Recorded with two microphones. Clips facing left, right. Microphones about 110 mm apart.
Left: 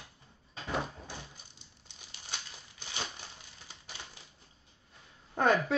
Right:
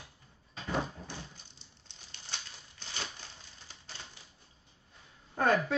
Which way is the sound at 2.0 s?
15° left (ahead or behind).